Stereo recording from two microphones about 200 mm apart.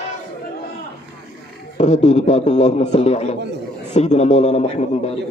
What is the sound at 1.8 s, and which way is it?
A man's voice, 35° left (ahead or behind).